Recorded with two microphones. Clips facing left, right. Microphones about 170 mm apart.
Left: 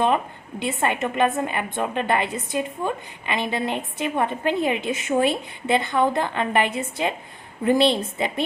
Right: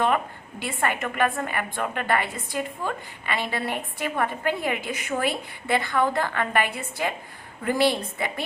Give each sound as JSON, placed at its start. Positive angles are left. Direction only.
{"t": 0.6, "sound": "a woman's voice", "side_deg": 20}